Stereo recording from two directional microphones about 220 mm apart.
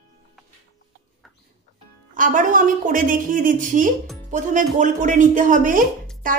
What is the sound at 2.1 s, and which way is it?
A woman's voice, 35° right (ahead or behind).